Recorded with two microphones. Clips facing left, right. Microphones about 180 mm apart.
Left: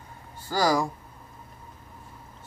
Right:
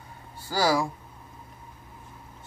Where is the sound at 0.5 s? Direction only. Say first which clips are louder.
Even; 5° right (ahead or behind).